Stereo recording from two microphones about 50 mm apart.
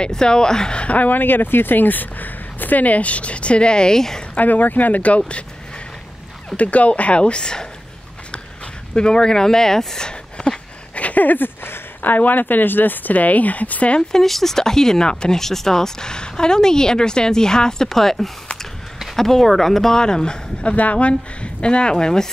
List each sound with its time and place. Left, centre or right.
0.0 s speech: centre
4.4 s speech: left
6.5 s speech: left
8.9 s speech: centre
14.1 s speech: centre
20.6 s speech: left; by 22.3 s centre